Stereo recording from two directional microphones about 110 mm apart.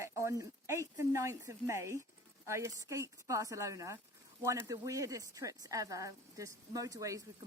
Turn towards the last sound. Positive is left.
turn(degrees=-30)  # may be behind; listen again after turning